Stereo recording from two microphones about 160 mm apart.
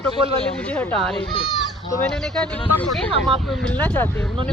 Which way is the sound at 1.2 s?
30° left (ahead or behind).